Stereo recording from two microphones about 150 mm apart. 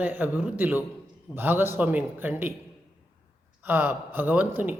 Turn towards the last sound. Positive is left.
turn(degrees=-10)  # may be behind; listen again after turning